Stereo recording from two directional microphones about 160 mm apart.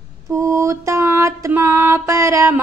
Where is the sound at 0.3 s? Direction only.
20° right (ahead or behind).